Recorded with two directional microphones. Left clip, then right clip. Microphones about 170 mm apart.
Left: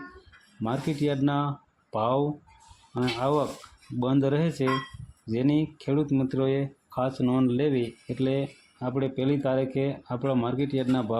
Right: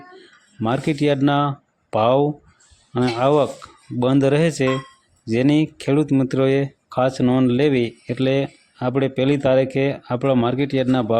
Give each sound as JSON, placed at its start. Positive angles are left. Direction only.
{"t": 0.6, "sound": "speech", "side_deg": -40}